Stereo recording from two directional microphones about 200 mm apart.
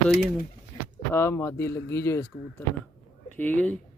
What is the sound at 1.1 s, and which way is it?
Speech, 10° left (ahead or behind).